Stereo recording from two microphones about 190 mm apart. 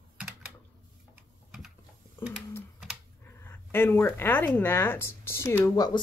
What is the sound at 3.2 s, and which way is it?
Speech, 10° left (ahead or behind).